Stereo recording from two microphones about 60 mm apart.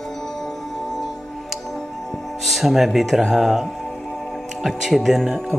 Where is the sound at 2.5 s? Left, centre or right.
Centre.